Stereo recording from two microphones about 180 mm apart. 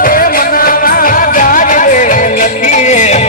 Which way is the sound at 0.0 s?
50° left (ahead or behind).